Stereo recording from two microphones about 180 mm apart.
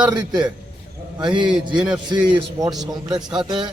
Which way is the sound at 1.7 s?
5° right (ahead or behind).